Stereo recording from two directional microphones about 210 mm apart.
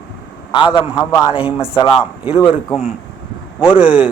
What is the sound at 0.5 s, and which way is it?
Speech, 20° left (ahead or behind).